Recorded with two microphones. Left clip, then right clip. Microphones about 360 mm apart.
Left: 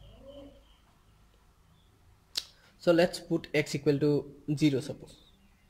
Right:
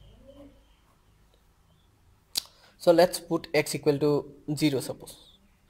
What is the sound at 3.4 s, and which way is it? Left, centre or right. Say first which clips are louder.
Speech: right 4 dB; centre.